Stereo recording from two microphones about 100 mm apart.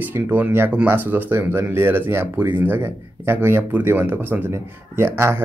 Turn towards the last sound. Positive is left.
turn(degrees=-25)  # may be behind; listen again after turning